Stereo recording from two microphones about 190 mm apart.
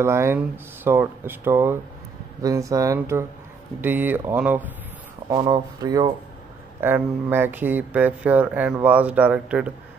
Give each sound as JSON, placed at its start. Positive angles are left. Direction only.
{"t": 0.0, "sound": "speech", "side_deg": -15}
{"t": 5.3, "sound": "speech", "side_deg": -20}